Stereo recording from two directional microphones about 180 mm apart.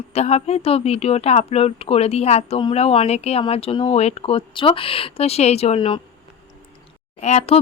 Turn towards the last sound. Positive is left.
turn(degrees=35)  # may be behind; listen again after turning